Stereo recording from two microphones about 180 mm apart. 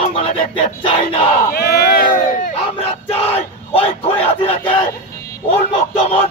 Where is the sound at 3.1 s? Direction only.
35° left (ahead or behind).